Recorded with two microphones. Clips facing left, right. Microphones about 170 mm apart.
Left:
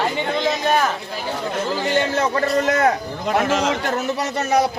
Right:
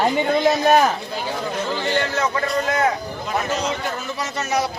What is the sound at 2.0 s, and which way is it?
Speech, 30° left (ahead or behind).